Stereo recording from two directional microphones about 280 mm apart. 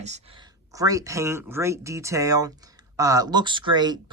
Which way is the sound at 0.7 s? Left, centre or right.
Centre.